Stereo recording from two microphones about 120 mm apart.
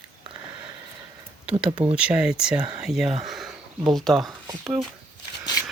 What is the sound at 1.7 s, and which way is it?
Speech, 10° right (ahead or behind).